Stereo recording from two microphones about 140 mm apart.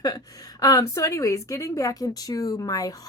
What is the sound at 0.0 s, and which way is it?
A woman's voice, 25° left (ahead or behind).